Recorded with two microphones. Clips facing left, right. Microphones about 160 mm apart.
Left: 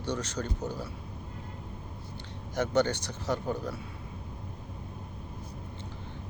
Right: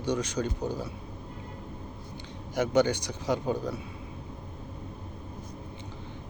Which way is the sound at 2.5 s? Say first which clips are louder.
Right 3 dB; 10° right (ahead or behind).